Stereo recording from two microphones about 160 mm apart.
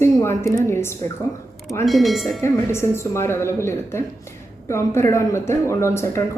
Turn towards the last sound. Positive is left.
turn(degrees=15)  # may be behind; listen again after turning